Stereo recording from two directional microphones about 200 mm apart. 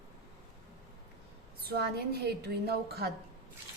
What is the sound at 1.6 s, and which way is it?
A woman's voice, 50° right (ahead or behind).